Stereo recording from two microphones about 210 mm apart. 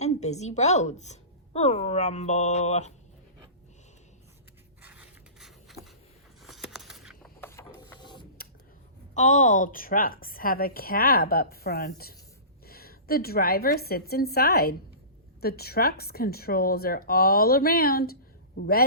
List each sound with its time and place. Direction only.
0.0 s a woman's voice: 30° left (ahead or behind)
4.8 s scrape: 5° right (ahead or behind)
6.4 s a sound: centre (ahead or behind)
7.4 s printer: 10° left (ahead or behind)
8.0 s mechanisms: 20° left (ahead or behind)
9.1 s a woman's voice: 35° left (ahead or behind)